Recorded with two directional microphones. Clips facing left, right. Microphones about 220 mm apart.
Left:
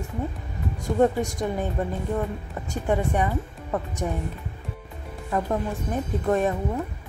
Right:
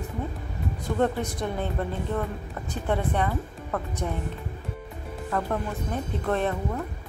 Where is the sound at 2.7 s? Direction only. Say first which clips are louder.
Left 3 dB; 10° left (ahead or behind).